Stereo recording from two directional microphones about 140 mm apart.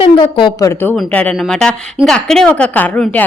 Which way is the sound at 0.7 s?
15° left (ahead or behind).